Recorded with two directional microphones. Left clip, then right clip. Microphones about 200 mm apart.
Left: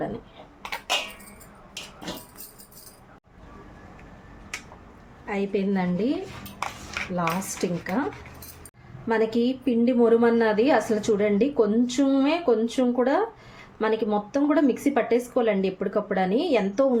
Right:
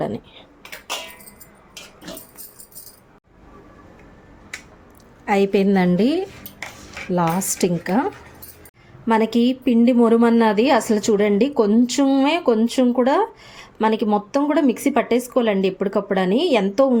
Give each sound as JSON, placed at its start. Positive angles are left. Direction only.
{"t": 5.2, "sound": "a woman's voice", "side_deg": -60}
{"t": 7.2, "sound": "a woman's voice", "side_deg": -55}
{"t": 9.0, "sound": "a woman's voice", "side_deg": -40}